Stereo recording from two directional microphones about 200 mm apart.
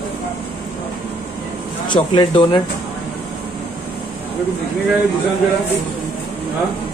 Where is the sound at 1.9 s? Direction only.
25° left (ahead or behind).